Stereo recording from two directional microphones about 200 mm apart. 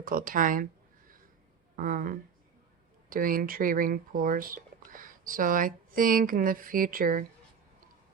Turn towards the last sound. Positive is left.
turn(degrees=-45)  # may be behind; listen again after turning